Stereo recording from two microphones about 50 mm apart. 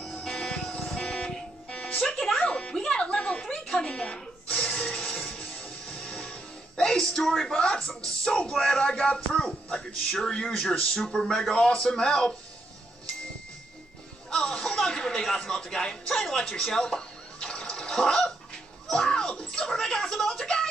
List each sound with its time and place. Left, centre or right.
0.0 s music: centre
4.6 s printer: centre
4.8 s music: centre
7.2 s speech: centre
14.3 s music: centre
14.6 s a sound: centre